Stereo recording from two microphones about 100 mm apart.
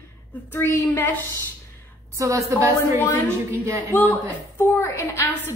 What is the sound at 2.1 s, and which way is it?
Speech, 30° right (ahead or behind).